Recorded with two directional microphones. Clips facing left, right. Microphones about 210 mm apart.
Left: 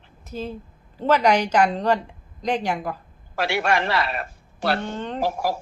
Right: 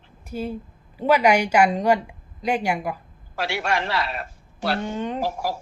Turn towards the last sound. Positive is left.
turn(degrees=60)  # may be behind; listen again after turning